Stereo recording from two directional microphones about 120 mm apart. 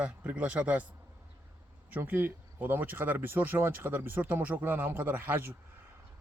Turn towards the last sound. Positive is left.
turn(degrees=-15)  # may be behind; listen again after turning